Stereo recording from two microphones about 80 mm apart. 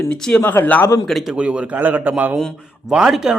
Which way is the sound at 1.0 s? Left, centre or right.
Centre.